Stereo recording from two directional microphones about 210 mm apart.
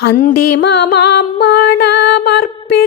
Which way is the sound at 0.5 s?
55° left (ahead or behind).